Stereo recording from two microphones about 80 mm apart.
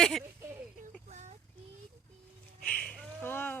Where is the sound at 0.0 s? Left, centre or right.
Centre.